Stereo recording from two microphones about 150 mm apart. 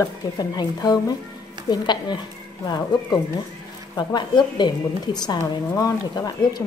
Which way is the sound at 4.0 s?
30° left (ahead or behind).